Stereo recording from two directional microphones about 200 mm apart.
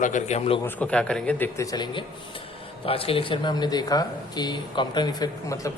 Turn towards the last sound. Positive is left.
turn(degrees=15)  # may be behind; listen again after turning